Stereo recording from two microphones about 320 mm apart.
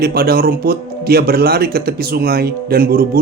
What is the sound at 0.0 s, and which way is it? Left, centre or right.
Speech, right.